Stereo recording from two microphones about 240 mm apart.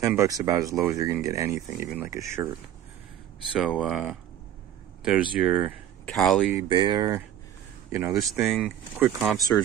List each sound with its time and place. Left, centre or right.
0.0 s speech: centre
3.5 s speech: centre
6.5 s speech: centre